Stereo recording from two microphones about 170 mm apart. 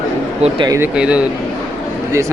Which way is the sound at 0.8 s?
5° right (ahead or behind).